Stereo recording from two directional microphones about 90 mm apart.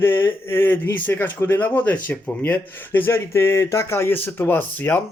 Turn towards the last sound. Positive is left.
turn(degrees=25)  # may be behind; listen again after turning